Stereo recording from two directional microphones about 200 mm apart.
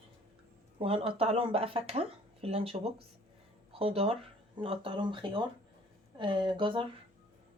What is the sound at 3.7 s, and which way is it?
Speech, 30° right (ahead or behind).